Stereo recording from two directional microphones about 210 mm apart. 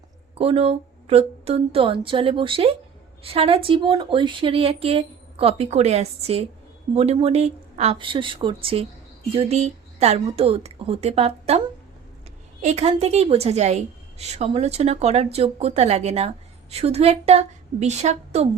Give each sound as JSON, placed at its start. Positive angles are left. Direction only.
{"t": 0.3, "sound": "speech", "side_deg": -25}
{"t": 12.6, "sound": "a woman's voice", "side_deg": -30}